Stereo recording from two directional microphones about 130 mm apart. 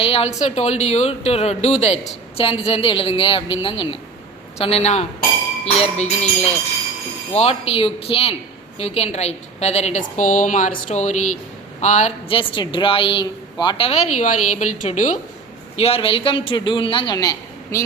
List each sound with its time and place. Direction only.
0.0 s a woman's voice: 50° left (ahead or behind)
2.4 s a woman's voice: 45° left (ahead or behind); by 12.1 s 65° left (ahead or behind)
12.3 s a woman's voice: 40° left (ahead or behind); by 15.2 s 65° left (ahead or behind)
15.8 s a man's voice: 45° left (ahead or behind); by 17.8 s 25° left (ahead or behind)